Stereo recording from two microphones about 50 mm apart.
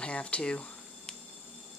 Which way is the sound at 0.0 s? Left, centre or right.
Left.